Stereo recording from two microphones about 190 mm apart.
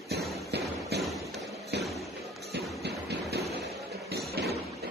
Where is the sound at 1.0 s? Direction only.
Centre (ahead or behind).